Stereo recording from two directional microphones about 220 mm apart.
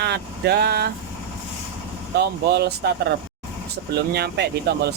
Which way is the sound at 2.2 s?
50° right (ahead or behind).